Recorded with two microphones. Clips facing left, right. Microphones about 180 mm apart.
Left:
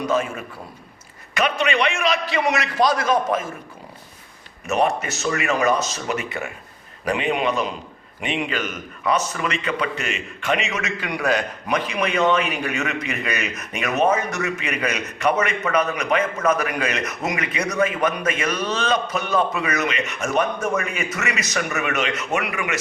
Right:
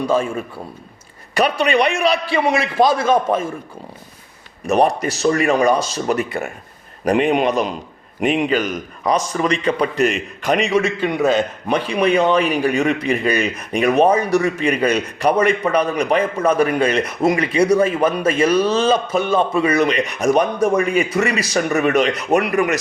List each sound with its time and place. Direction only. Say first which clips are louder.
0.0 s a man's voice: right 4 dB; 30° right (ahead or behind)
4.6 s a man's voice: right 5 dB; 35° right (ahead or behind)